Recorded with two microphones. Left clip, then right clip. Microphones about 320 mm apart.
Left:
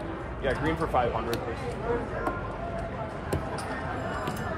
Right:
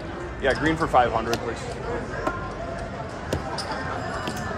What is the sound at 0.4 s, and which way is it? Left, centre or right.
Speech, right.